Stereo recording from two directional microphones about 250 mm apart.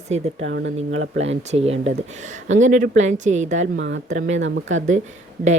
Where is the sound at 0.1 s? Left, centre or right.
Right.